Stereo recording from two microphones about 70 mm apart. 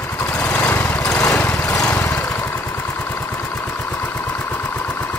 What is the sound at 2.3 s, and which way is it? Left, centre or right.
Vehicle, left.